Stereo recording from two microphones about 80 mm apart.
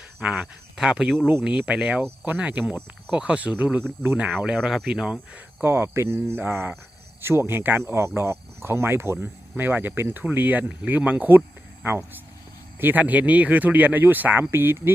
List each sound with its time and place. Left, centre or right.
0.2 s speech: centre
2.0 s speech: right
4.4 s speech: centre
5.6 s speech: right